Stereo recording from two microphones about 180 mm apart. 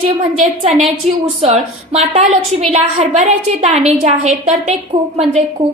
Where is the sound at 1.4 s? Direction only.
35° right (ahead or behind).